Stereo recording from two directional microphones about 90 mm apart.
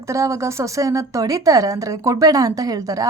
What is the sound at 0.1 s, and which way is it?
A woman's voice, 35° right (ahead or behind).